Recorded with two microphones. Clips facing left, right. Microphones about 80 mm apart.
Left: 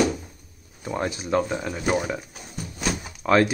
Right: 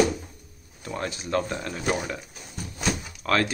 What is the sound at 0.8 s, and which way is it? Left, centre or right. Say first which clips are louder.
Speech: left 4 dB; centre.